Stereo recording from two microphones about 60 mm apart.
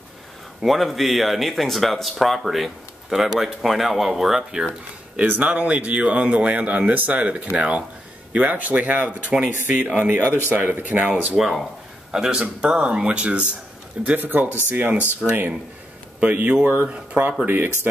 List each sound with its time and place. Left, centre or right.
0.6 s speech: centre
5.1 s speech: right
11.3 s speech: centre
12.1 s speech: centre; by 16.9 s right